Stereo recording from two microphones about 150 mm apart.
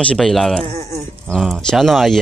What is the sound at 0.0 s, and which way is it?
Speech, 5° left (ahead or behind).